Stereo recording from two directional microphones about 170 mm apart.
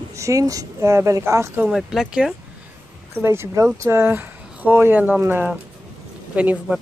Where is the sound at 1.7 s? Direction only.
Centre (ahead or behind).